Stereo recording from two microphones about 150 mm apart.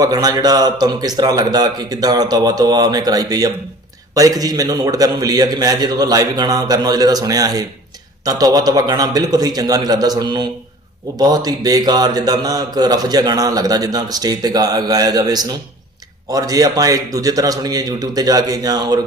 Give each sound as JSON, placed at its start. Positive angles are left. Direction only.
{"t": 0.0, "sound": "speech", "side_deg": -25}